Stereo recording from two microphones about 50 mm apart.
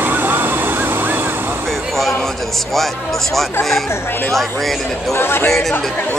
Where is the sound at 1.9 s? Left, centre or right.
Centre.